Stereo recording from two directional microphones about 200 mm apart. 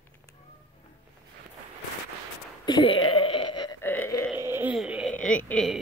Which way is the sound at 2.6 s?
25° left (ahead or behind).